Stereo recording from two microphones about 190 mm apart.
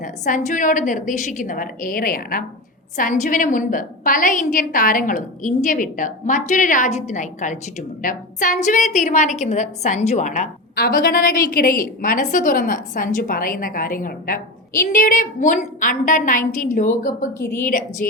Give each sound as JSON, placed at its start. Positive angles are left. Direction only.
{"t": 0.0, "sound": "a woman's voice", "side_deg": 45}
{"t": 10.8, "sound": "a woman's voice", "side_deg": 50}